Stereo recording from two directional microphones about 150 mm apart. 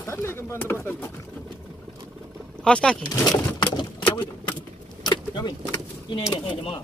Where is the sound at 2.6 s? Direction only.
5° left (ahead or behind).